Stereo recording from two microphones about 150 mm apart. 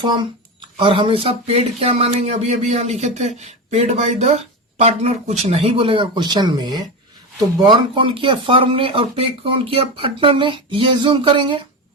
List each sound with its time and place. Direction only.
0.0 s speech: 30° right (ahead or behind)